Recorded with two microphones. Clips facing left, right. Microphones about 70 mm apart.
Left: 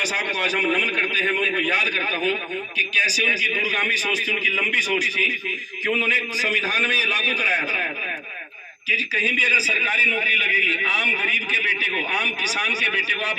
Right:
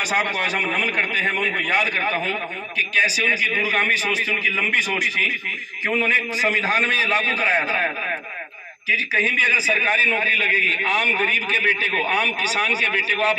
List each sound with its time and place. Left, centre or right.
0.0 s a man's voice: right
1.5 s a man's voice: centre
1.7 s a man's voice: right
8.9 s a man's voice: right